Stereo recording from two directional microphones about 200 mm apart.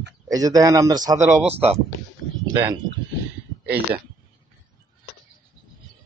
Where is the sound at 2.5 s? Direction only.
10° right (ahead or behind).